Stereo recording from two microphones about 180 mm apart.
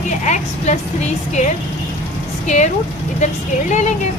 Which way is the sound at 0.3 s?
40° left (ahead or behind).